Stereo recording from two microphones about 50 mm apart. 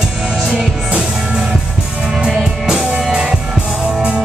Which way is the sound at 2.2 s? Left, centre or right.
Centre.